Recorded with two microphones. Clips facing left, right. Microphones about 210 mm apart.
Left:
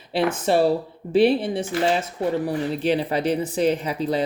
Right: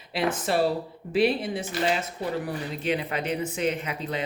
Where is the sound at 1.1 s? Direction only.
30° left (ahead or behind).